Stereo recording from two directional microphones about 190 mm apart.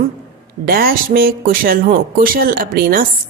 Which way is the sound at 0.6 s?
50° right (ahead or behind).